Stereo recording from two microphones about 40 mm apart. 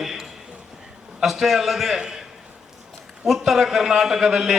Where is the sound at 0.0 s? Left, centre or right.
Centre.